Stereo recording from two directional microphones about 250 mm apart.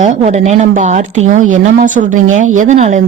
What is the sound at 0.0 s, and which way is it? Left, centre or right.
A woman's voice, right.